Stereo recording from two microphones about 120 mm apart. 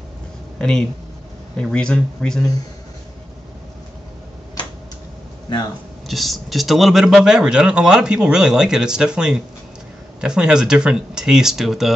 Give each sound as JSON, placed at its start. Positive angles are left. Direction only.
{"t": 0.6, "sound": "speech", "side_deg": 5}
{"t": 5.5, "sound": "speech", "side_deg": 40}
{"t": 6.0, "sound": "speech", "side_deg": 0}